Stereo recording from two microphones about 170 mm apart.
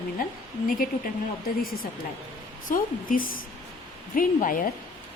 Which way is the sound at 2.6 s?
55° left (ahead or behind).